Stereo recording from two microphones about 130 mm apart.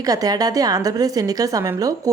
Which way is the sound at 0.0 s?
30° right (ahead or behind).